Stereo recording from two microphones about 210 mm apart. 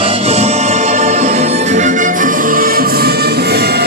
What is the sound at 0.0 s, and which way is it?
Music, 25° right (ahead or behind).